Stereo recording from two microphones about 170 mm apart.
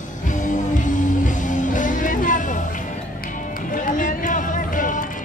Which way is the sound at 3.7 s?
50° left (ahead or behind).